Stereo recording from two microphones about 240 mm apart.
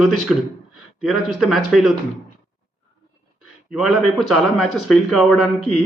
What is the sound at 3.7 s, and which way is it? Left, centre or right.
A man's voice, centre.